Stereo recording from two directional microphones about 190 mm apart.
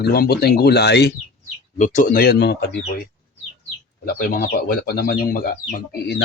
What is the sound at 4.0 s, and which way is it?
Speech, 50° left (ahead or behind).